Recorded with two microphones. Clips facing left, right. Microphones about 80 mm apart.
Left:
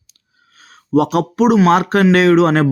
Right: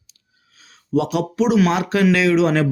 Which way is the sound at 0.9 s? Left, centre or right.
Left.